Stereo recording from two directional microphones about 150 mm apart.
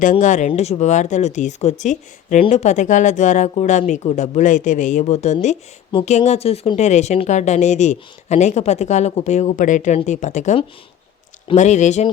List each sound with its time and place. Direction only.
0.0 s speech: 55° left (ahead or behind)